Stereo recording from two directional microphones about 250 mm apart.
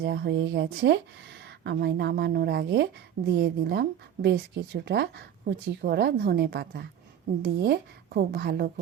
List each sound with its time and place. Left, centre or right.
0.0 s speech: right